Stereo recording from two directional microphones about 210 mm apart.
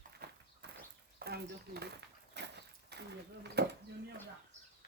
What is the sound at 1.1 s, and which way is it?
Speech, 50° right (ahead or behind).